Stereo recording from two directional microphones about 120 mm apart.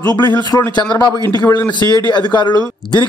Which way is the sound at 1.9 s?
40° left (ahead or behind).